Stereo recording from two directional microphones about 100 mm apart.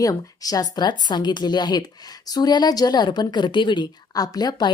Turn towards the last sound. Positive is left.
turn(degrees=45)  # may be behind; listen again after turning